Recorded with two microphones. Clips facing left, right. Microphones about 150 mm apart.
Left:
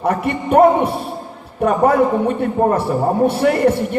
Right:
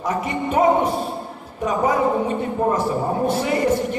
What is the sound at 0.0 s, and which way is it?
A man's voice, 60° left (ahead or behind).